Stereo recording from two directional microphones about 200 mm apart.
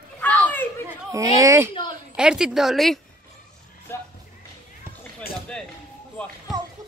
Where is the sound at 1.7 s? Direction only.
25° left (ahead or behind).